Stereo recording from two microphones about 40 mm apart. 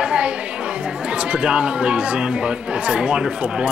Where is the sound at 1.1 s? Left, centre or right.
Right.